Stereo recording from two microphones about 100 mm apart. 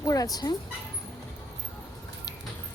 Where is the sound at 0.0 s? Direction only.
40° left (ahead or behind).